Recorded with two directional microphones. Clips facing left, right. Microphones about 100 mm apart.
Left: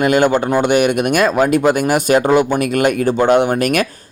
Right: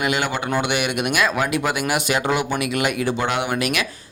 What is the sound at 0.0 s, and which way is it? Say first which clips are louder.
Speech: left 9 dB; 45° left (ahead or behind).